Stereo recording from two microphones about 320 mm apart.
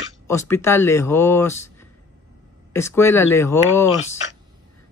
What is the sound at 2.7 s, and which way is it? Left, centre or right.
Speech, centre.